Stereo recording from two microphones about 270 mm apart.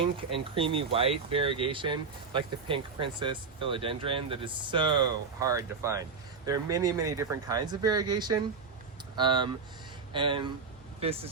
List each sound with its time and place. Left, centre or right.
0.0 s speech: centre